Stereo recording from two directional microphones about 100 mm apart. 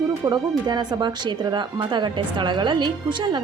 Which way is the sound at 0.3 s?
45° right (ahead or behind).